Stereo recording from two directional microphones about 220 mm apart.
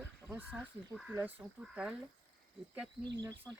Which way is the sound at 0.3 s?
10° right (ahead or behind).